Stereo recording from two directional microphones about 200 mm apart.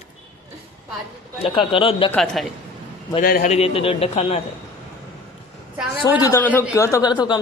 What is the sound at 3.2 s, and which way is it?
Speech, 45° left (ahead or behind).